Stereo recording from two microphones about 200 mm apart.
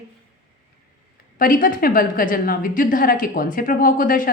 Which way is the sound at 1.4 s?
45° left (ahead or behind).